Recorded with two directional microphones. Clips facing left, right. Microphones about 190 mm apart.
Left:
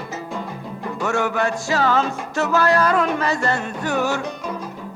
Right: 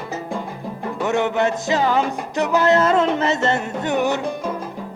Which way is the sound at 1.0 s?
20° right (ahead or behind).